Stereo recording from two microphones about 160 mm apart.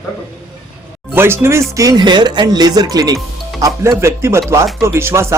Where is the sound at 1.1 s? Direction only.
15° right (ahead or behind).